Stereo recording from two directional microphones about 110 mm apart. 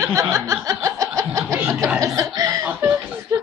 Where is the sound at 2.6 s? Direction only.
15° right (ahead or behind).